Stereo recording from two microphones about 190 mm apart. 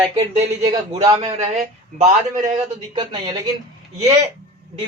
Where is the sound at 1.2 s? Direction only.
35° right (ahead or behind).